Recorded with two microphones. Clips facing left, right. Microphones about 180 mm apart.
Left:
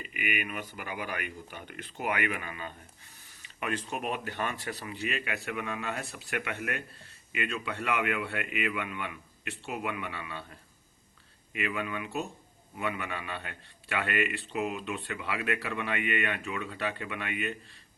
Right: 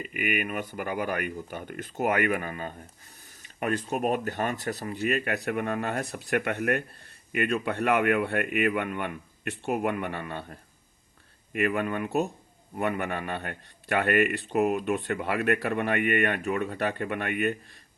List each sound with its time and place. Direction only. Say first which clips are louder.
0.0 s speech: right 5 dB; 45° right (ahead or behind)